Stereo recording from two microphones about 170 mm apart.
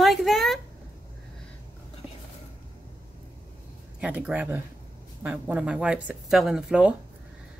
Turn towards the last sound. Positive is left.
turn(degrees=-5)  # may be behind; listen again after turning